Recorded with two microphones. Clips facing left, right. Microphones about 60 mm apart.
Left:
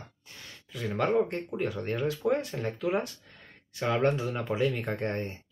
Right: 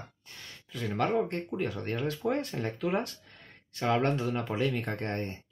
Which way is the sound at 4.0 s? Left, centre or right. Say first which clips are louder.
Left 1 dB; centre.